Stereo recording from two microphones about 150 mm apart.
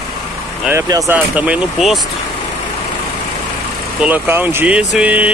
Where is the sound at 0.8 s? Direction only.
25° right (ahead or behind).